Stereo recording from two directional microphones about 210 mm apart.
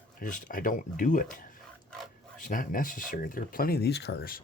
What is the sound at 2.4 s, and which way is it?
Speech, 40° left (ahead or behind).